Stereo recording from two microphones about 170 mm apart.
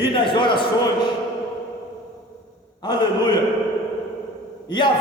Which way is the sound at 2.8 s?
25° left (ahead or behind).